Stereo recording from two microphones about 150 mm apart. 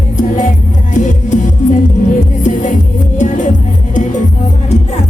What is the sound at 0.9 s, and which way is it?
Music, 55° left (ahead or behind).